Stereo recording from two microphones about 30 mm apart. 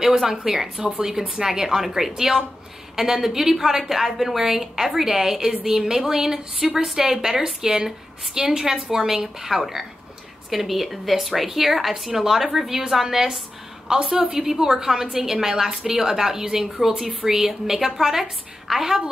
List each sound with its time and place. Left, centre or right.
0.2 s a woman's voice: centre
13.9 s a woman's voice: right
14.3 s a woman's voice: centre
16.6 s a woman's voice: centre